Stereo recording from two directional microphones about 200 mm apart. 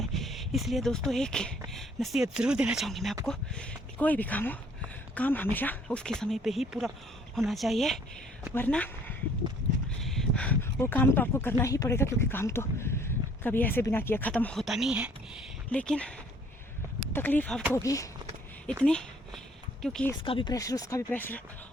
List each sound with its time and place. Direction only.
0.0 s speech: centre (ahead or behind)
15.7 s speech: 5° left (ahead or behind)
18.8 s speech: 5° left (ahead or behind)
20.2 s speech: 25° left (ahead or behind); by 21.4 s 10° left (ahead or behind)